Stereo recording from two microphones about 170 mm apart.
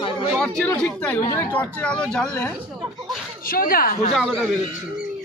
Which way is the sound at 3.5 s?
60° left (ahead or behind).